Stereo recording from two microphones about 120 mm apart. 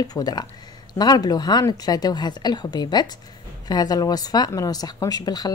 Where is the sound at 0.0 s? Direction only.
35° left (ahead or behind).